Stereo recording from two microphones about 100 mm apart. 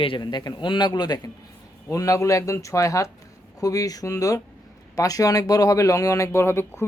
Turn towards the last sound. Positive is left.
turn(degrees=25)  # may be behind; listen again after turning